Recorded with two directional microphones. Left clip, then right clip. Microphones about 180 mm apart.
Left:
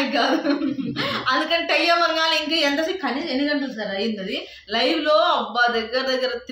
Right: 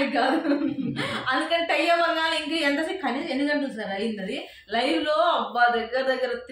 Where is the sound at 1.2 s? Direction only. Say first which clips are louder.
Left 3 dB; 20° left (ahead or behind).